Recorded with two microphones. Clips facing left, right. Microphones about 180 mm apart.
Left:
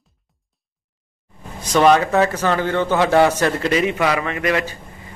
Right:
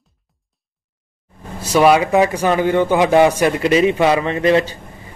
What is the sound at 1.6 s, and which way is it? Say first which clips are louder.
A man's voice: right 2 dB; 10° right (ahead or behind).